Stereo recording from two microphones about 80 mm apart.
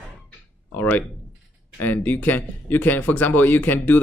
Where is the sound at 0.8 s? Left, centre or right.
Left.